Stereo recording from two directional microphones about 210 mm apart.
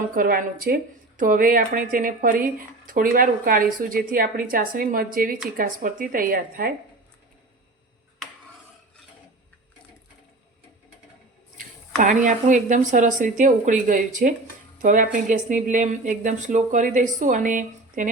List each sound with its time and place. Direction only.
0.1 s speech: 40° right (ahead or behind)
12.0 s speech: 35° right (ahead or behind)